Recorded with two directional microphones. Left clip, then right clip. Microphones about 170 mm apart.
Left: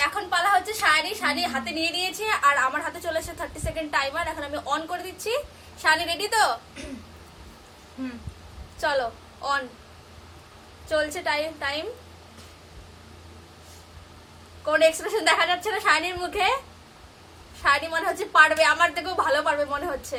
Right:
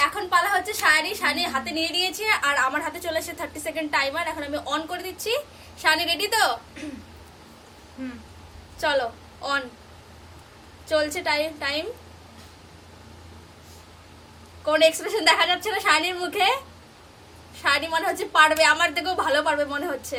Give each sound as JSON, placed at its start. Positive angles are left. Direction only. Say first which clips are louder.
{"t": 0.0, "sound": "a woman's voice", "louder": "right 2 dB", "side_deg": -15}
{"t": 8.8, "sound": "a woman's voice", "louder": "right 1 dB", "side_deg": -15}
{"t": 10.8, "sound": "a woman's voice", "louder": "right 2 dB", "side_deg": -15}
{"t": 14.6, "sound": "a woman's voice", "louder": "right 1 dB", "side_deg": -15}
{"t": 17.6, "sound": "a woman's voice", "louder": "even", "side_deg": -15}